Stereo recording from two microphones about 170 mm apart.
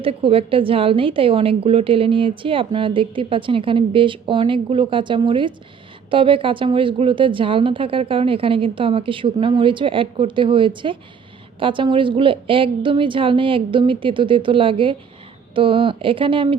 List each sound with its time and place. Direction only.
0.0 s a woman's voice: 35° right (ahead or behind)